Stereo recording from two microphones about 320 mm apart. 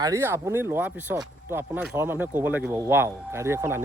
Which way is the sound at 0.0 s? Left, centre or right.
Centre.